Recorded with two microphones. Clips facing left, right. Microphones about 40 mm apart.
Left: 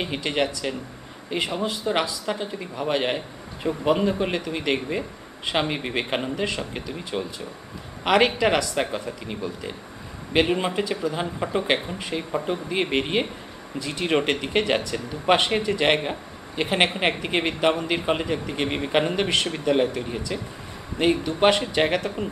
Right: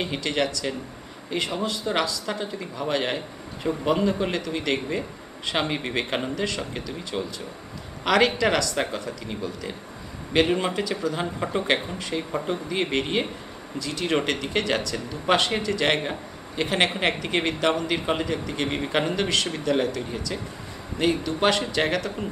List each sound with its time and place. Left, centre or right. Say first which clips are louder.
0.0 s speech: left 1 dB; centre
8.0 s a man's voice: left 1 dB; centre
11.1 s speech: left 1 dB; centre
12.9 s speech: left 1 dB; centre